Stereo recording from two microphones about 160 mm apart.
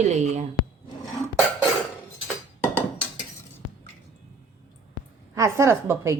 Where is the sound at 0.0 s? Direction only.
45° right (ahead or behind).